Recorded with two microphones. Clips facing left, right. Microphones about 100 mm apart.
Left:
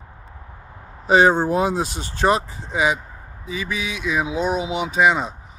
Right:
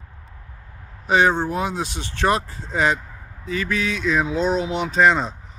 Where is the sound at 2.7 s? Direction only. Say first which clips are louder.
Even; 10° left (ahead or behind).